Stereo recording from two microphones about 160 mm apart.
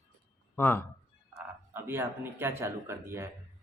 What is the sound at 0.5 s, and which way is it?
Speech, 10° left (ahead or behind).